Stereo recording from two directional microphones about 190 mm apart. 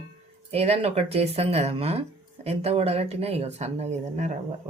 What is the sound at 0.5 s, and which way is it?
Speech, 35° right (ahead or behind).